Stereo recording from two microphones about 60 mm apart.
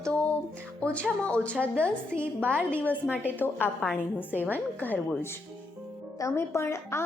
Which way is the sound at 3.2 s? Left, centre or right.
Left.